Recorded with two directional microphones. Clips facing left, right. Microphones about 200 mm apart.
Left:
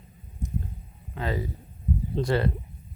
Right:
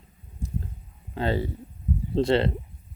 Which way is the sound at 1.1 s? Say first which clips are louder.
Right 4 dB; 30° right (ahead or behind).